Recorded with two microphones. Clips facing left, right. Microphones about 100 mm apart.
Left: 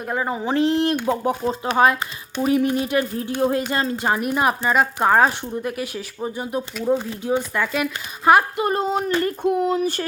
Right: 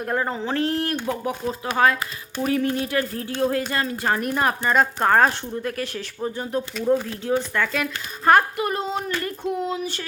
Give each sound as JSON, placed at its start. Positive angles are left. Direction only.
{"t": 0.0, "sound": "speech", "side_deg": 5}
{"t": 8.5, "sound": "speech", "side_deg": 30}
{"t": 8.8, "sound": "speech", "side_deg": 50}